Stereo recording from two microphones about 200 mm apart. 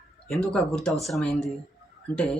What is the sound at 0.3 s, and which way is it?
Speech, centre (ahead or behind).